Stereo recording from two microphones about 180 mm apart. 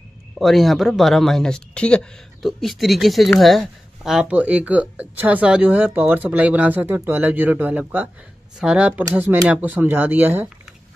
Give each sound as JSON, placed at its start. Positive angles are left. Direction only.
{"t": 0.4, "sound": "speech", "side_deg": 0}